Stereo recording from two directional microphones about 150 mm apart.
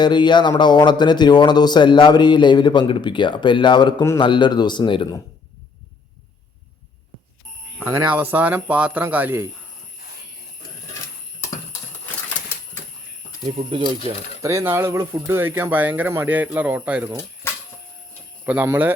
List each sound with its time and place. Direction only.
0.0 s speech: 30° left (ahead or behind)
7.8 s speech: 15° right (ahead or behind)
13.4 s speech: 30° right (ahead or behind)
14.4 s speech: 20° right (ahead or behind)
18.4 s speech: 10° right (ahead or behind)